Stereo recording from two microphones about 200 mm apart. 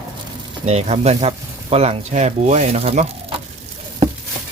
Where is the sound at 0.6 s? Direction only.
35° right (ahead or behind).